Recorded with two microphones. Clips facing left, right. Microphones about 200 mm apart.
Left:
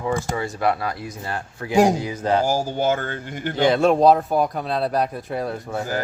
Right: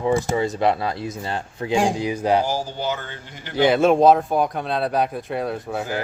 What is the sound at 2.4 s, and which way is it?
Speech, 45° left (ahead or behind).